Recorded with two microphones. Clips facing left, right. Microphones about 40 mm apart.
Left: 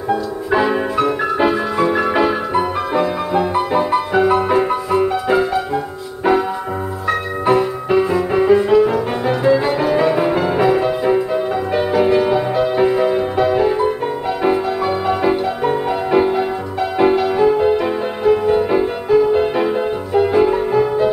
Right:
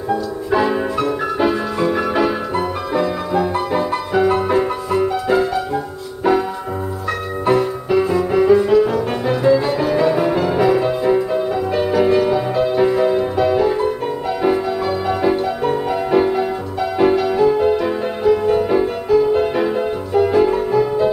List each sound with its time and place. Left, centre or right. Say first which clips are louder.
0.1 s music: left 1 dB; left
7.5 s music: left 1 dB; left
15.0 s music: even; left